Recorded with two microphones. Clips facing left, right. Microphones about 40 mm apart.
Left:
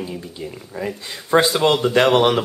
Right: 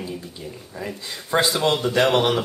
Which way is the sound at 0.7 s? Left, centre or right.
Centre.